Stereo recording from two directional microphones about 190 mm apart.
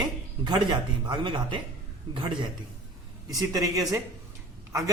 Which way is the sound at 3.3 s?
20° right (ahead or behind).